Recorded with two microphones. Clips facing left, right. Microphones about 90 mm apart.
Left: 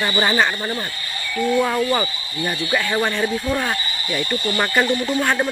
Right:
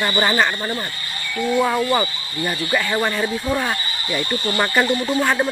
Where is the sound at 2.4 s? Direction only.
Centre (ahead or behind).